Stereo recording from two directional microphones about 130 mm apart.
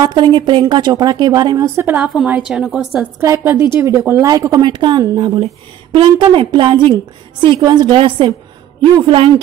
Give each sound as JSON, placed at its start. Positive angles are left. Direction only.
{"t": 0.0, "sound": "a woman's voice", "side_deg": -35}
{"t": 1.8, "sound": "a woman's voice", "side_deg": -15}
{"t": 3.2, "sound": "a woman's voice", "side_deg": -15}